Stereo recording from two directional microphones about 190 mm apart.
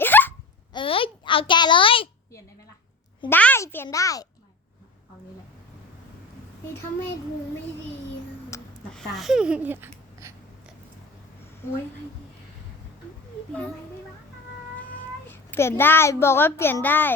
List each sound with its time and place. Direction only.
0.0 s hiccup: 10° left (ahead or behind)
0.7 s a sound: 25° left (ahead or behind)
3.2 s a child's voice: 10° left (ahead or behind)
8.5 s a sound: 15° left (ahead or behind)
8.9 s speech: 5° left (ahead or behind); by 10.3 s 15° right (ahead or behind)
14.9 s a child's voice: 10° left (ahead or behind)